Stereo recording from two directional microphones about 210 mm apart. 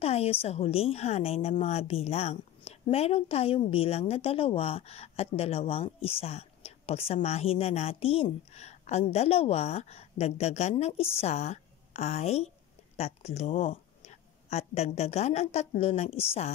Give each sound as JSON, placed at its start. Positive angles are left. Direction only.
{"t": 0.0, "sound": "a woman's voice", "side_deg": 30}